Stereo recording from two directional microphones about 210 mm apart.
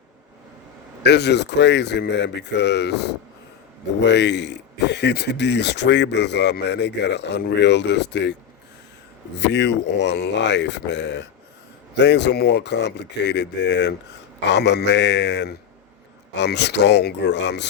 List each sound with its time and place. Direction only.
1.0 s speech: 55° left (ahead or behind)
9.4 s speech: 55° left (ahead or behind)